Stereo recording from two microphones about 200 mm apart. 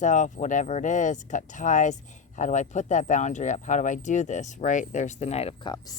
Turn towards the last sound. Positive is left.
turn(degrees=20)  # may be behind; listen again after turning